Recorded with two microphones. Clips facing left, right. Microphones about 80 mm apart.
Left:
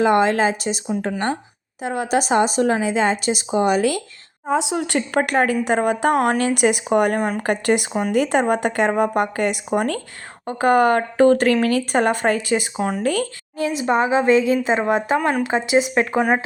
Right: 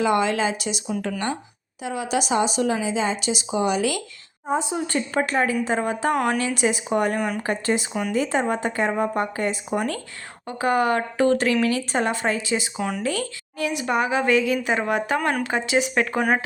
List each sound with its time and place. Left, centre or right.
0.0 s speech: left
1.8 s speech: left
4.4 s speech: left
7.4 s speech: left
13.6 s a woman's voice: left